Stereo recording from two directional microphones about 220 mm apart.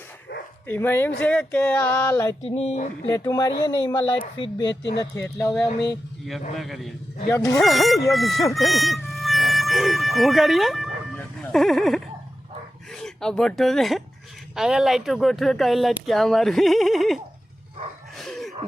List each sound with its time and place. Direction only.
0.7 s speech: 10° left (ahead or behind)
2.4 s speech: 30° left (ahead or behind)
3.1 s speech: 15° left (ahead or behind)
4.7 s speech: 50° left (ahead or behind)
4.9 s speech: 10° left (ahead or behind)
7.3 s speech: 15° left (ahead or behind)
7.6 s speech: centre (ahead or behind)
8.5 s music: centre (ahead or behind)
12.9 s speech: 5° left (ahead or behind)
18.2 s a sound: centre (ahead or behind)